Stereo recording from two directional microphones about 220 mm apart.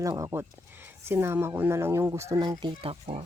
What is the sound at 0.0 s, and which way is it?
Speech, 15° right (ahead or behind).